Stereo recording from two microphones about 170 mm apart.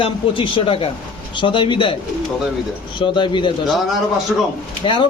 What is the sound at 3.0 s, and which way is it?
Speech, 30° left (ahead or behind).